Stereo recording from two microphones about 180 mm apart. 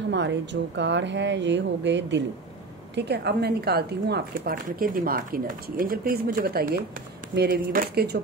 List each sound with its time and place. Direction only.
0.1 s speech: 80° right
3.0 s speech: 65° right (ahead or behind)